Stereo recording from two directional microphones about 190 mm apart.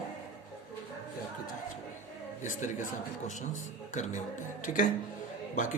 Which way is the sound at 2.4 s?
40° left (ahead or behind).